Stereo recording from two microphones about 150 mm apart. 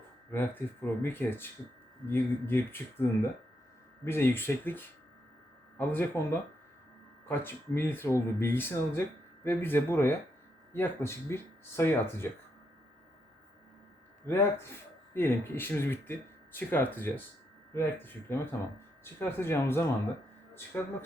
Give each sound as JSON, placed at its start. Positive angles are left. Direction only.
{"t": 0.3, "sound": "speech", "side_deg": 15}
{"t": 14.3, "sound": "speech", "side_deg": 20}